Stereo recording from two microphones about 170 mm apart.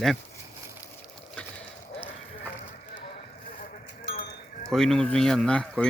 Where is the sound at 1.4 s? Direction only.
10° left (ahead or behind).